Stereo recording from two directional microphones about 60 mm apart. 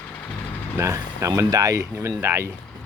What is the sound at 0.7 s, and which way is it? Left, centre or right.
Speech, right.